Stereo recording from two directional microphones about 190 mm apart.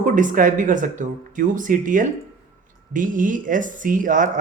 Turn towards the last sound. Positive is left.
turn(degrees=-45)  # may be behind; listen again after turning